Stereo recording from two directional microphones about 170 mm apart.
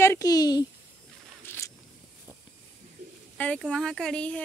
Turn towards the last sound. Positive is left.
turn(degrees=5)  # may be behind; listen again after turning